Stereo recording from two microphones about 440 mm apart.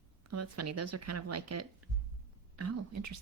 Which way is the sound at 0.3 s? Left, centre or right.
Right.